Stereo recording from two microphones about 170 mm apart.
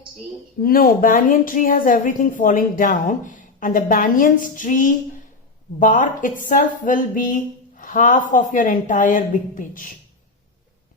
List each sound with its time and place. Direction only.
0.6 s a woman's voice: 60° left (ahead or behind)